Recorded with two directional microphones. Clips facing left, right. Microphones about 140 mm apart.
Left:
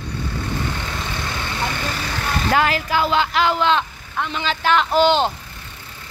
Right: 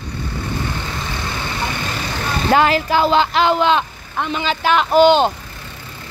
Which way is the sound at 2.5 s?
25° right (ahead or behind).